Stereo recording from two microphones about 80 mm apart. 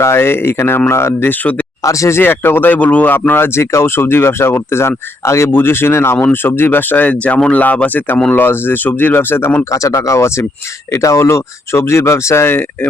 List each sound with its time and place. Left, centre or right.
0.0 s speech: left
1.8 s speech: left
9.6 s speech: left